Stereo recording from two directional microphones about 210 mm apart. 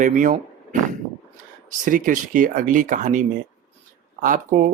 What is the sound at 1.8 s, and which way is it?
Speech, 40° right (ahead or behind).